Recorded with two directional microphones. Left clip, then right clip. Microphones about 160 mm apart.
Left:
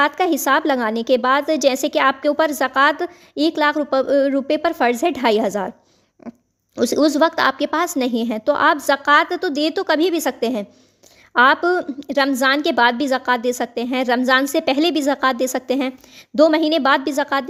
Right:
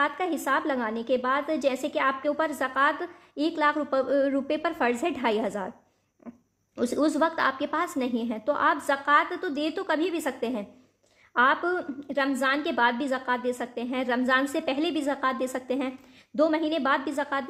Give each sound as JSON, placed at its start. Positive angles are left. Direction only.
{"t": 0.0, "sound": "a woman's voice", "side_deg": 50}